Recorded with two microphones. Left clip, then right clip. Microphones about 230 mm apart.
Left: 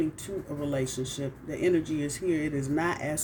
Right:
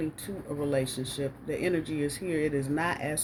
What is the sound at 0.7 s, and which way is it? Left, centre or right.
Speech, right.